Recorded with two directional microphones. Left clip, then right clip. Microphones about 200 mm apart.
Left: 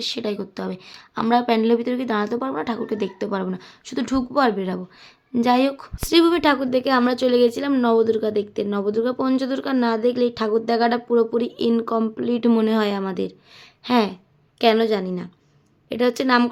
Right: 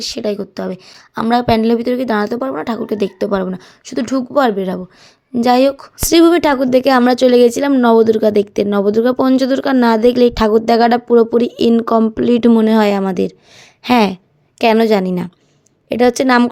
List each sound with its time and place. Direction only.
0.0 s speech: 20° right (ahead or behind)
6.1 s a woman's voice: 35° right (ahead or behind)
15.9 s a woman's voice: 30° right (ahead or behind)